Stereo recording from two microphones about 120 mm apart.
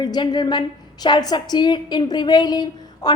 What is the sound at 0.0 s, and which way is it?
A woman's voice, 35° left (ahead or behind).